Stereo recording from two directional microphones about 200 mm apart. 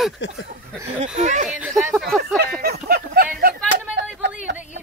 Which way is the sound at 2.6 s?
50° right (ahead or behind).